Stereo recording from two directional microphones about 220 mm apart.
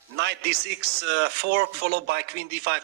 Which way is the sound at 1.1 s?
50° right (ahead or behind).